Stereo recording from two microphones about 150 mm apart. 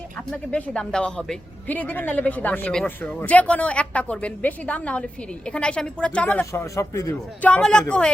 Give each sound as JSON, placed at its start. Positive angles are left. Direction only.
{"t": 0.3, "sound": "speech", "side_deg": 5}
{"t": 6.4, "sound": "a man's voice", "side_deg": 20}
{"t": 7.5, "sound": "speech", "side_deg": 5}